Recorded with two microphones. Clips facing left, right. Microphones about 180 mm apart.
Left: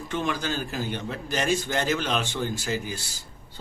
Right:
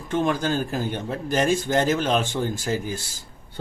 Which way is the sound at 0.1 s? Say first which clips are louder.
Right 6 dB; 50° right (ahead or behind).